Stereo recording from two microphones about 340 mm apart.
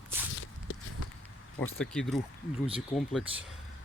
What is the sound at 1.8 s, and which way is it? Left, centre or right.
Speech, centre.